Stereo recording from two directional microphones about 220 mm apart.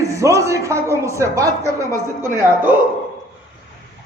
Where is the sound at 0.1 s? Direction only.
15° right (ahead or behind).